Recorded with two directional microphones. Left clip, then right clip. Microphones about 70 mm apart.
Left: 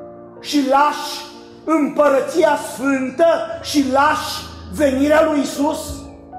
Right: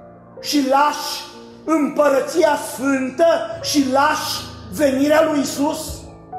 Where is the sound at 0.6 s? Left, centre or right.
Centre.